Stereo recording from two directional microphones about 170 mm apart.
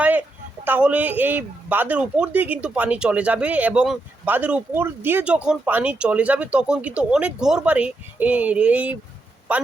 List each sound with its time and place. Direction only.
0.0 s speech: 10° right (ahead or behind)